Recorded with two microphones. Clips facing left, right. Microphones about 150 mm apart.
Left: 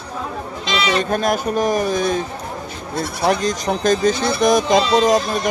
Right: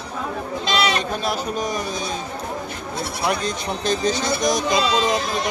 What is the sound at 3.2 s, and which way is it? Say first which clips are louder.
Speech: left 6 dB; 40° left (ahead or behind).